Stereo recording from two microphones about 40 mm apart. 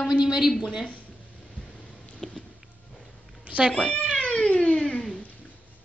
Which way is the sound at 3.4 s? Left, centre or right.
Right.